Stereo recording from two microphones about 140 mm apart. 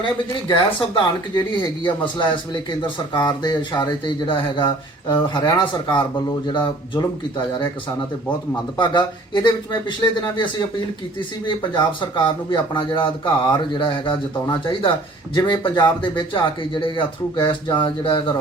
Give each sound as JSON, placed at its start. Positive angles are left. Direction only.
{"t": 0.0, "sound": "speech", "side_deg": 35}
{"t": 8.8, "sound": "speech", "side_deg": 30}